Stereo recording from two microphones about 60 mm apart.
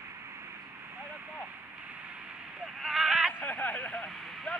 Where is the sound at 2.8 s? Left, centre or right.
Centre.